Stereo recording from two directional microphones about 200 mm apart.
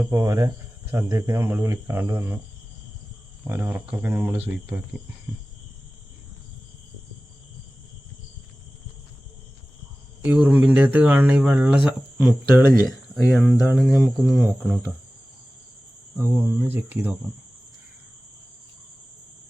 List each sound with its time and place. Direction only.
0.0 s speech: 15° right (ahead or behind)
3.4 s speech: 10° right (ahead or behind)
10.2 s speech: 5° right (ahead or behind)
13.2 s speech: 5° left (ahead or behind)
16.1 s speech: 10° right (ahead or behind)